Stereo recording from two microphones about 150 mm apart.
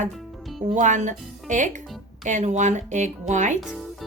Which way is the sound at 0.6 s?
55° right (ahead or behind).